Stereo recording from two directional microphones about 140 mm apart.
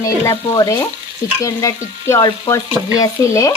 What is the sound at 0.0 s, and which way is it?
Frying, 25° left (ahead or behind).